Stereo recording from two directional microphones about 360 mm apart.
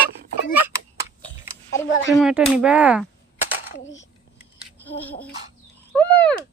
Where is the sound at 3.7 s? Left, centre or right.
Left.